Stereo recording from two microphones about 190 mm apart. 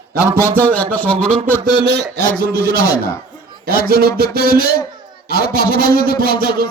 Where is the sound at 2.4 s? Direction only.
60° right (ahead or behind).